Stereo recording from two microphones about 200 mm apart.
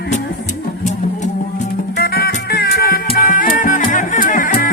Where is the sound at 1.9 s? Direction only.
55° left (ahead or behind).